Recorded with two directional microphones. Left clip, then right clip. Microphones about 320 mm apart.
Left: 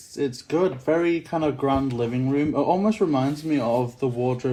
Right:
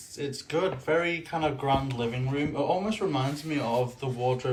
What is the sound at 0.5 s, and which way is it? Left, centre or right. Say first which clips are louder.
Speech: left 4 dB; left.